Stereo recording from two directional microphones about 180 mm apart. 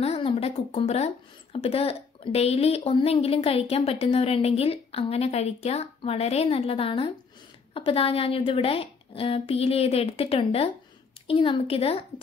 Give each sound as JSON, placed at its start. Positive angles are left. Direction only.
{"t": 0.0, "sound": "speech", "side_deg": 35}